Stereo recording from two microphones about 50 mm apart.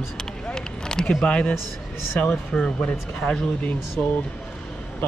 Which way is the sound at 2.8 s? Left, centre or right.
Left.